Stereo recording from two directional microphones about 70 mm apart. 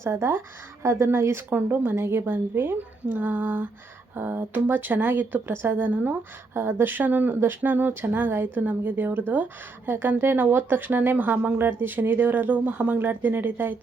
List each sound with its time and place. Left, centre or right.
0.0 s a woman's voice: right